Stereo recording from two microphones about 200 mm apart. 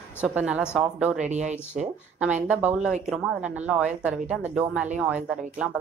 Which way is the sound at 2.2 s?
5° right (ahead or behind).